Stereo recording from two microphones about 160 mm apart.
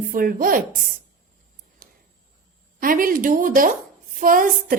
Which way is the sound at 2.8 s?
60° right (ahead or behind).